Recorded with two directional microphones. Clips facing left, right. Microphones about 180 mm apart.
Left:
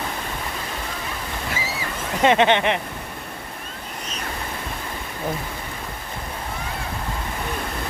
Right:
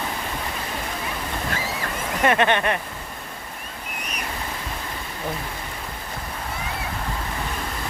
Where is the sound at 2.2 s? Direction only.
20° left (ahead or behind).